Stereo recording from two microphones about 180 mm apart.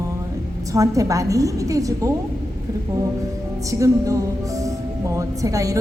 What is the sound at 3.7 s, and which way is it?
Speech, 20° right (ahead or behind).